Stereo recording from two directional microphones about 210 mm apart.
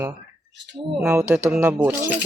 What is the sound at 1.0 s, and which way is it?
Speech, 10° right (ahead or behind).